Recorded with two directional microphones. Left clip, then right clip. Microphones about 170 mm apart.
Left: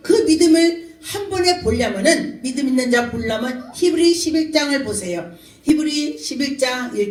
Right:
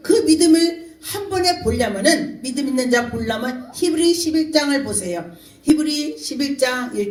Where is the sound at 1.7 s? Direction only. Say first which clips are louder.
Left 1 dB; 40° right (ahead or behind).